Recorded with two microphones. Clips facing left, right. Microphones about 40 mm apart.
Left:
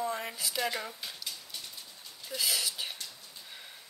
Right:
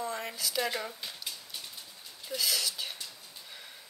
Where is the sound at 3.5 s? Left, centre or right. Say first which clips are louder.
Even; centre.